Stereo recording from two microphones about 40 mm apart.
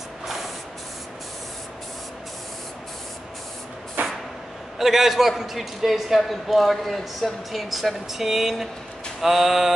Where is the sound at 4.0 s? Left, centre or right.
Right.